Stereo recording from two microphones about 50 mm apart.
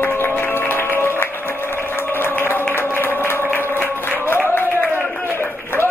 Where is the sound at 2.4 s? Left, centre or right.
Left.